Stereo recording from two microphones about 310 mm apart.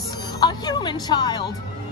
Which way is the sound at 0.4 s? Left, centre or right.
Centre.